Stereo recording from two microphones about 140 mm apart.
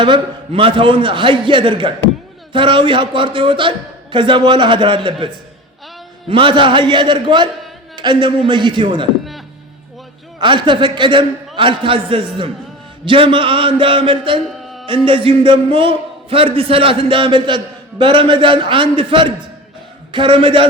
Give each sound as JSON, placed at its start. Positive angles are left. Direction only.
{"t": 0.0, "sound": "a man's voice", "side_deg": -35}
{"t": 6.2, "sound": "a man's voice", "side_deg": -40}
{"t": 10.4, "sound": "a man's voice", "side_deg": -35}
{"t": 14.4, "sound": "a sound", "side_deg": 0}
{"t": 14.8, "sound": "a man's voice", "side_deg": -40}